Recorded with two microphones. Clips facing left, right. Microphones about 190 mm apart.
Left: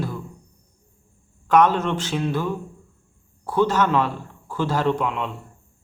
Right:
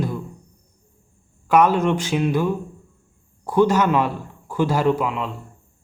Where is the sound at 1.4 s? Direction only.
10° right (ahead or behind).